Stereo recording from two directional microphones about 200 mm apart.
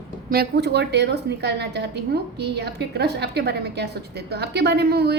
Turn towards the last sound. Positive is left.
turn(degrees=-55)  # may be behind; listen again after turning